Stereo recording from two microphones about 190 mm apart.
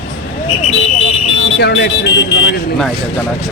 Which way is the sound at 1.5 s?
65° left (ahead or behind).